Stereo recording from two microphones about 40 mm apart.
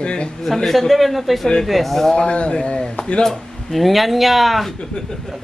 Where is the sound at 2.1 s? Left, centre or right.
Left.